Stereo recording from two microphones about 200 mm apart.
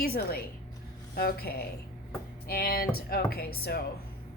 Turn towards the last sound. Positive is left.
turn(degrees=50)  # may be behind; listen again after turning